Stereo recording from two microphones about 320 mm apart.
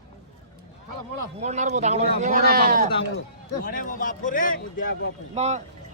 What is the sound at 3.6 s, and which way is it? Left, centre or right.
A man's voice, left.